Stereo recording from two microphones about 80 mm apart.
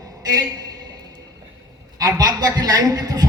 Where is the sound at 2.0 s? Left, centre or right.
Right.